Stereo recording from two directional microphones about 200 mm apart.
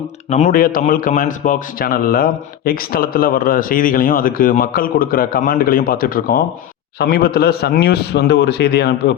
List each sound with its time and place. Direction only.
0.3 s a man's voice: 35° left (ahead or behind); by 9.1 s 55° left (ahead or behind)